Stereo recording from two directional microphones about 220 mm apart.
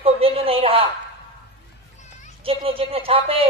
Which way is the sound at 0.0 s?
25° right (ahead or behind).